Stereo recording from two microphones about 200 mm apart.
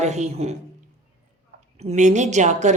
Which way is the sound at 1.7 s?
35° right (ahead or behind).